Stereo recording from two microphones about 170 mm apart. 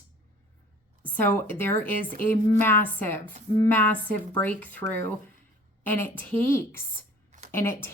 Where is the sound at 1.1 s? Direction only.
10° left (ahead or behind).